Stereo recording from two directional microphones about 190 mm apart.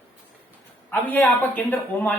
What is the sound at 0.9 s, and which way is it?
A man's voice, 10° left (ahead or behind).